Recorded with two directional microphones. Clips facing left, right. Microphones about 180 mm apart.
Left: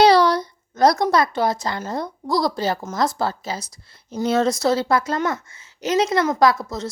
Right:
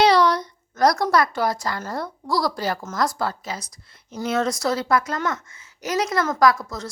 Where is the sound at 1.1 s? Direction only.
25° left (ahead or behind).